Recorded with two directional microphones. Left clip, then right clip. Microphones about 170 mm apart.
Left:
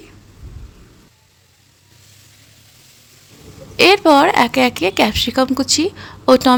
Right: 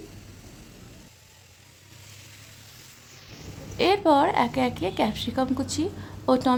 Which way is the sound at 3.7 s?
20° left (ahead or behind).